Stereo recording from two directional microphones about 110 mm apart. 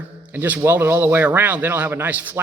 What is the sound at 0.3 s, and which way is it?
A man's voice, 15° right (ahead or behind).